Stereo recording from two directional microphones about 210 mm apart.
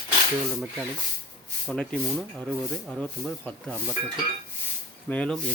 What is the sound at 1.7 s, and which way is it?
Speech, 5° left (ahead or behind).